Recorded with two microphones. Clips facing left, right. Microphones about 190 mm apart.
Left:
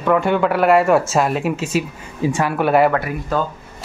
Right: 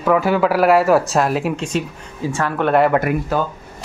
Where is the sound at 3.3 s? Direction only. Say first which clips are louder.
Left 2 dB; 5° right (ahead or behind).